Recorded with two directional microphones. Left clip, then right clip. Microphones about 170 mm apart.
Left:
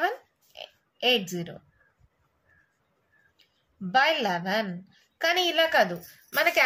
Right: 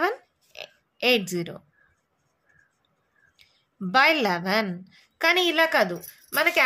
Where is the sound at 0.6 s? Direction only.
50° right (ahead or behind).